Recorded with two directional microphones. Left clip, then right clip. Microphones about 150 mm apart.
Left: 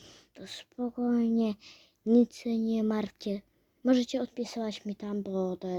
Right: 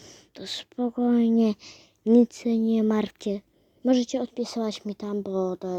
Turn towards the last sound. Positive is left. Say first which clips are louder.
# right 5 dB
turn(degrees=-30)  # may be behind; listen again after turning